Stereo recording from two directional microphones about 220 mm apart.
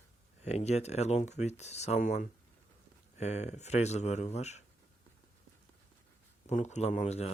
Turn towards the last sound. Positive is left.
turn(degrees=30)  # may be behind; listen again after turning